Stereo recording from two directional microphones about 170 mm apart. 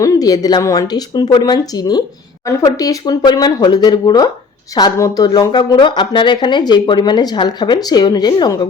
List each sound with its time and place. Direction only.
0.0 s speech: 20° left (ahead or behind)